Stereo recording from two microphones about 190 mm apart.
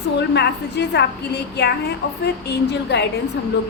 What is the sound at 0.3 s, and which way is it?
A woman's voice, 60° left (ahead or behind).